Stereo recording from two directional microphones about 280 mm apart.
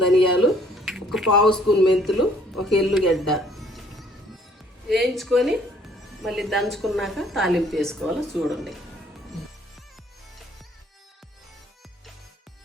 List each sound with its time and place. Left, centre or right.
0.4 s a sound: centre
2.6 s speech: centre
4.9 s a woman's voice: centre